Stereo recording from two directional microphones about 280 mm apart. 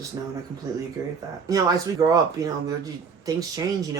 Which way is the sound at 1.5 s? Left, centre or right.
Centre.